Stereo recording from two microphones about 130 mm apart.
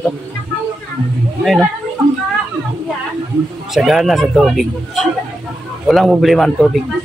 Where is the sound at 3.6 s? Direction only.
Centre (ahead or behind).